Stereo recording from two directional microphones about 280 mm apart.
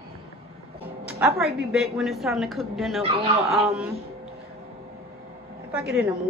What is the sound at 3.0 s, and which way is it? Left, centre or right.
Speech, right.